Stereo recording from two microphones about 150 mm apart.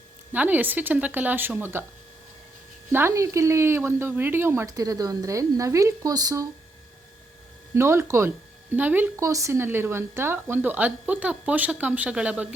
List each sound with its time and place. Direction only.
0.3 s speech: 10° right (ahead or behind)
2.9 s speech: 15° right (ahead or behind)
7.7 s speech: 20° right (ahead or behind)